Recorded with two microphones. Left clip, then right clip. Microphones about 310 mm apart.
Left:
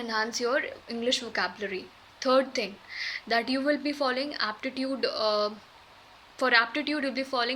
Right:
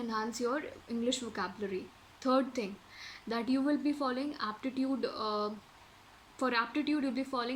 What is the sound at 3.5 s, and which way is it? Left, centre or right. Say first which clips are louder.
Speech: left 5 dB; left.